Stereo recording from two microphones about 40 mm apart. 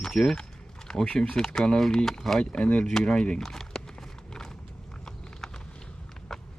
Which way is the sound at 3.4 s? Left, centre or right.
Centre.